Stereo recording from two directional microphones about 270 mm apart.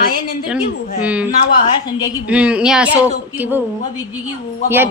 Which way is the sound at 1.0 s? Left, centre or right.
Centre.